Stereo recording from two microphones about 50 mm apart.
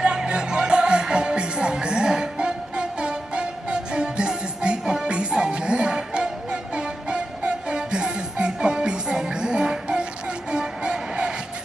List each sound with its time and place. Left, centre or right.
0.0 s music: centre